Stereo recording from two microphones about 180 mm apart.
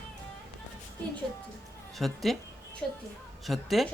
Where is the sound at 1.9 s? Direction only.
Centre (ahead or behind).